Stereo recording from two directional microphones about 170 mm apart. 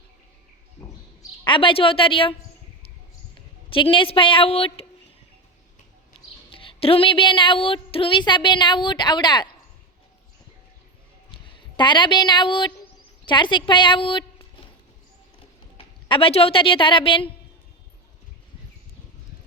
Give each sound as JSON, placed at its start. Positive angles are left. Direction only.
{"t": 1.5, "sound": "a woman's voice", "side_deg": 30}
{"t": 3.3, "sound": "speech", "side_deg": 30}
{"t": 6.5, "sound": "speech", "side_deg": 35}
{"t": 11.8, "sound": "a woman's voice", "side_deg": 25}
{"t": 16.0, "sound": "a woman's voice", "side_deg": 30}